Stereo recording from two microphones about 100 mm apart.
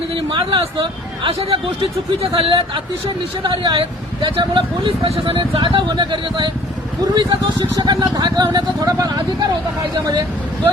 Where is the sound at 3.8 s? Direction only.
60° right (ahead or behind).